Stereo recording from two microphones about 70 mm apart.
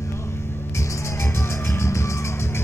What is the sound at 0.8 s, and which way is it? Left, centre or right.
Music, left.